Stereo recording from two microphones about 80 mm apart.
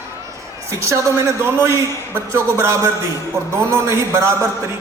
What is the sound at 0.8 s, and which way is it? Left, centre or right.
A man's voice, right.